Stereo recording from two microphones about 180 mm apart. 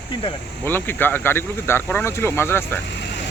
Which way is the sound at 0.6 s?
10° left (ahead or behind).